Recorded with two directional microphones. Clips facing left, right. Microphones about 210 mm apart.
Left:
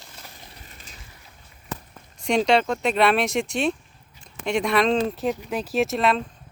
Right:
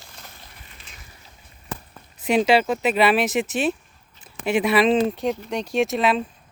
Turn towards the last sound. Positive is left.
turn(degrees=0)  # may be behind; listen again after turning